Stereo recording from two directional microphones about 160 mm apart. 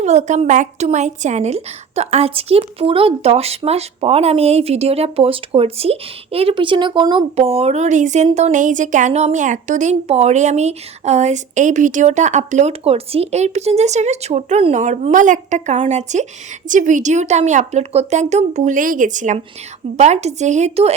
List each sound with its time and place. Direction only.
0.0 s a woman's voice: 45° right (ahead or behind)